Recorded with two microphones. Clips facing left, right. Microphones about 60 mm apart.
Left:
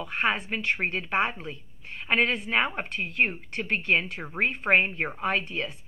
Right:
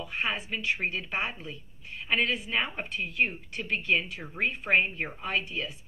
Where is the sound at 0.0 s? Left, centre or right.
Left.